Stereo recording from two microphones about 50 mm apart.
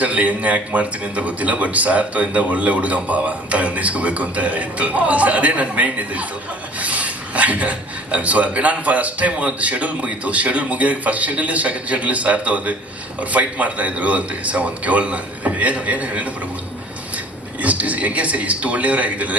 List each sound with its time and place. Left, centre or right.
0.0 s speech: right
17.6 s speech: right